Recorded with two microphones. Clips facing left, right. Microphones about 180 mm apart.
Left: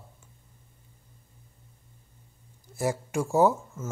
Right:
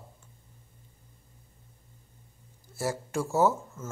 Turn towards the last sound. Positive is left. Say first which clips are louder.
# left 3 dB
turn(degrees=15)  # may be behind; listen again after turning